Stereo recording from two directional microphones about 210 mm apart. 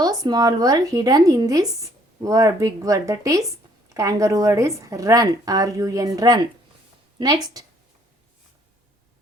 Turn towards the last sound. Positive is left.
turn(degrees=-15)  # may be behind; listen again after turning